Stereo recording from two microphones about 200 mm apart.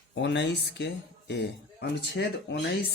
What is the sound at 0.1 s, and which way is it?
Speech, 60° left (ahead or behind).